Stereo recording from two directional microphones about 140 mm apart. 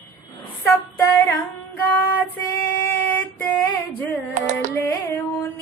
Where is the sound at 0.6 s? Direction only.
15° left (ahead or behind).